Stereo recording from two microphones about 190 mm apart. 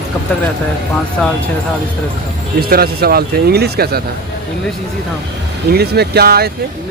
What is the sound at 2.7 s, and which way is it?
Speech, 55° right (ahead or behind).